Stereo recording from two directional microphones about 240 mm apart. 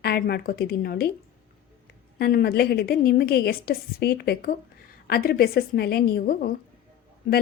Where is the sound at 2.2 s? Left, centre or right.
Left.